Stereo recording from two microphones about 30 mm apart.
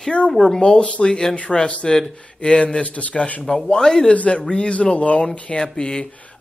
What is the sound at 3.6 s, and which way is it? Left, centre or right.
Speech, left.